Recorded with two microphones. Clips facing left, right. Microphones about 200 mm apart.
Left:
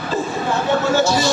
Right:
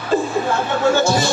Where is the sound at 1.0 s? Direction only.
50° right (ahead or behind).